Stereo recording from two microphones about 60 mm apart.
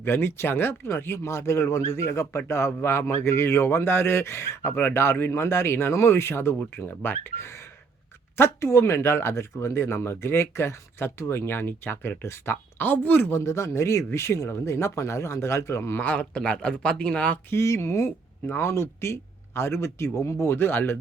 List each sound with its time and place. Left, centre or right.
0.0 s speech: left
4.7 s speech: left
6.6 s speech: left
8.4 s speech: left
12.8 s speech: left
13.4 s speech: left
16.0 s speech: left
17.5 s speech: left
18.4 s speech: left
18.7 s speech: left
20.4 s speech: left